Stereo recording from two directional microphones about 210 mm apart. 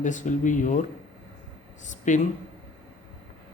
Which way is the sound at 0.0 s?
35° left (ahead or behind).